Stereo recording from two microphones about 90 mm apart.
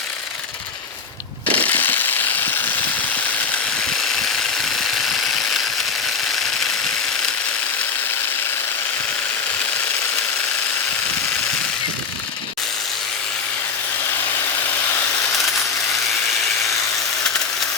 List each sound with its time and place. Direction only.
1.5 s ratchet: 15° left (ahead or behind)